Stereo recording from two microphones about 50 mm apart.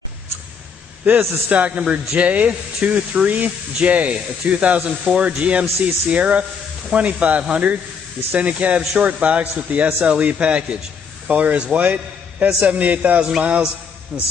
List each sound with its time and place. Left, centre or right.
1.1 s a man's voice: right
1.5 s a man's voice: right